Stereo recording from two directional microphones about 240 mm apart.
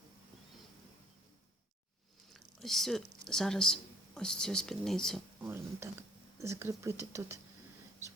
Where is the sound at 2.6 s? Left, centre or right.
Centre.